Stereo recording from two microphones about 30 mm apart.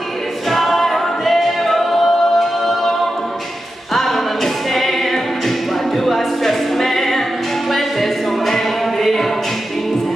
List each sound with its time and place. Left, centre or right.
0.5 s singing: centre
3.9 s music: centre